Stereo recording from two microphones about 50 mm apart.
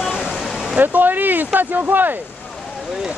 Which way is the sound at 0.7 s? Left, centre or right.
Right.